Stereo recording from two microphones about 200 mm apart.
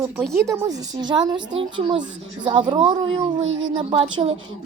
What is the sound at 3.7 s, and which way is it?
Speech, 25° right (ahead or behind).